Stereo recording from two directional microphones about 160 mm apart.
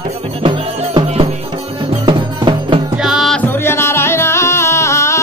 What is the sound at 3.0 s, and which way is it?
Music, centre (ahead or behind).